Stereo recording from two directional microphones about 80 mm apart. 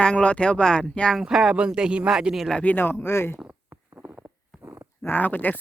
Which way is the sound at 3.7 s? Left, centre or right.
Centre.